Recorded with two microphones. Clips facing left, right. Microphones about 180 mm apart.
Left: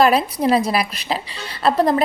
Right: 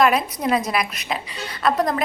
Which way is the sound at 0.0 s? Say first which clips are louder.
Left 3 dB; 30° left (ahead or behind).